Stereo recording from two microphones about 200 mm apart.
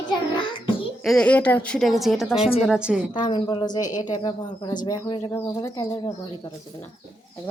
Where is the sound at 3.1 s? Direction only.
20° left (ahead or behind).